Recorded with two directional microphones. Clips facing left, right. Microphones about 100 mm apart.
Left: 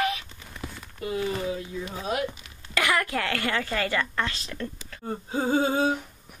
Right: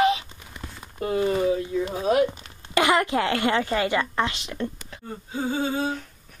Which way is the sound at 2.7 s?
25° right (ahead or behind).